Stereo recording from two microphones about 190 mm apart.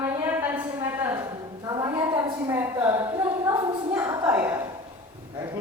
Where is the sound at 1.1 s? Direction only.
20° right (ahead or behind).